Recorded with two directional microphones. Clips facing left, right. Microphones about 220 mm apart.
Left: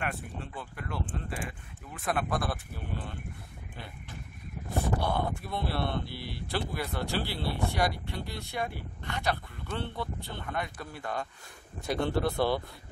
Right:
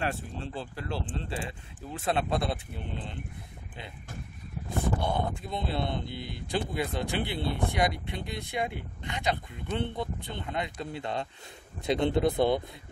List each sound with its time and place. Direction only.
0.0 s speech: 30° right (ahead or behind)
5.0 s speech: 20° right (ahead or behind)